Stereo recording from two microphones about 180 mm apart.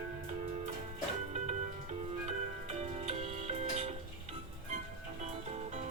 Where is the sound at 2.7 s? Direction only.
35° right (ahead or behind).